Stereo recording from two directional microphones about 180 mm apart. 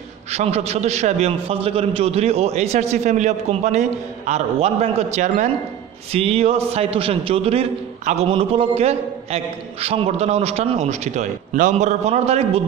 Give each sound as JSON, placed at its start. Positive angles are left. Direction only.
{"t": 0.3, "sound": "a man's voice", "side_deg": -35}